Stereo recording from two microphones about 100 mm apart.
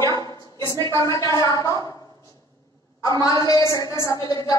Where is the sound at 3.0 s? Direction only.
35° left (ahead or behind).